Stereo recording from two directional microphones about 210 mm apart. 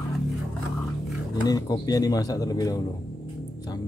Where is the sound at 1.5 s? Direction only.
20° left (ahead or behind).